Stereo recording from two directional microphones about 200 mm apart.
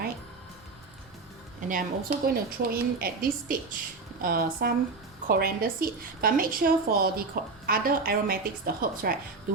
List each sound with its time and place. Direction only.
1.6 s a woman's voice: 40° right (ahead or behind)